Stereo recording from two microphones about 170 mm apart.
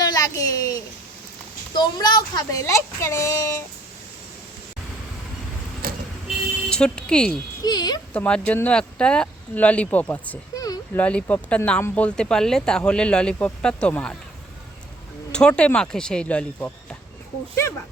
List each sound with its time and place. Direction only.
0.0 s a sound: 20° left (ahead or behind)
1.7 s a woman's voice: 25° left (ahead or behind)
5.8 s vehicle: 60° right (ahead or behind)
6.2 s music: 5° left (ahead or behind)
7.6 s a woman's voice: 25° left (ahead or behind)
8.1 s speech: 5° left (ahead or behind)
10.5 s a sound: 20° left (ahead or behind)
10.9 s speech: 10° left (ahead or behind)
15.3 s speech: 5° left (ahead or behind)